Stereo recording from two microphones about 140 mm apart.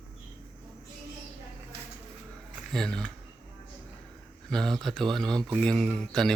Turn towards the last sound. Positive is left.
turn(degrees=5)  # may be behind; listen again after turning